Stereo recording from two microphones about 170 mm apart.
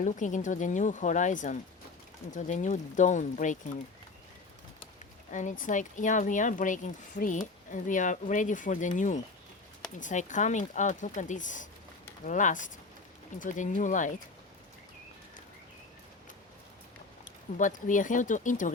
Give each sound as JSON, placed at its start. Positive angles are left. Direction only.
{"t": 0.0, "sound": "speech", "side_deg": 45}
{"t": 5.3, "sound": "speech", "side_deg": 50}
{"t": 17.6, "sound": "speech", "side_deg": 50}